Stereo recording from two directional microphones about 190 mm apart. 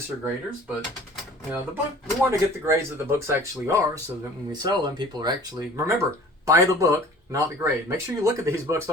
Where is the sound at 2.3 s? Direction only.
15° right (ahead or behind).